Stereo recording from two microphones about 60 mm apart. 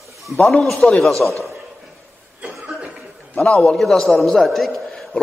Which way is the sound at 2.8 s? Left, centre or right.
Right.